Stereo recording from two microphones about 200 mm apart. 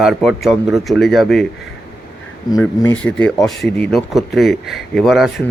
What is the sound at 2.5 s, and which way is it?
Speech, 15° left (ahead or behind).